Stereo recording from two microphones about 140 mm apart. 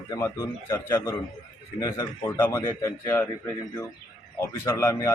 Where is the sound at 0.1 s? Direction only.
25° left (ahead or behind).